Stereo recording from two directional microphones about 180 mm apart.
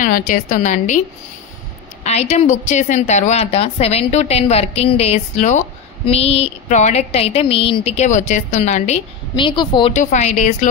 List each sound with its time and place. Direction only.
0.0 s a woman's voice: 45° left (ahead or behind)
2.0 s a woman's voice: 40° left (ahead or behind)
9.9 s a woman's voice: 40° left (ahead or behind)